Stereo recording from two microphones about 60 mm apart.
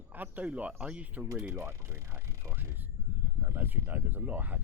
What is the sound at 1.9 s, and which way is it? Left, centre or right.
Speech, right.